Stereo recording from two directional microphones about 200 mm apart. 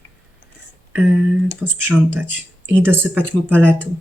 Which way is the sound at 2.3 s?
65° right (ahead or behind).